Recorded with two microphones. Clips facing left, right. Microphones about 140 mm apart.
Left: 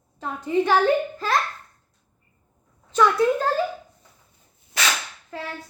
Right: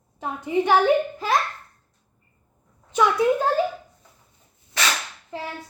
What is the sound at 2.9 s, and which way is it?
Speech, 15° right (ahead or behind).